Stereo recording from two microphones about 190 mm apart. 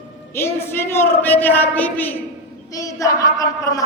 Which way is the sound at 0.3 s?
10° left (ahead or behind).